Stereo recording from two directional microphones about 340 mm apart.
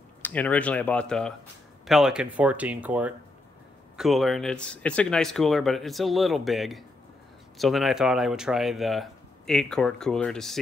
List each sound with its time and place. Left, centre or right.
0.2 s speech: centre